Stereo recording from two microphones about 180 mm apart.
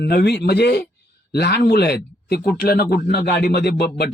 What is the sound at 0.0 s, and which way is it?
Speech, 65° left (ahead or behind).